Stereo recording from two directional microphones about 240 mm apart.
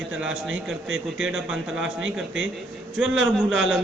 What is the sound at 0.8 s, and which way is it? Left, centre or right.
Speech, right.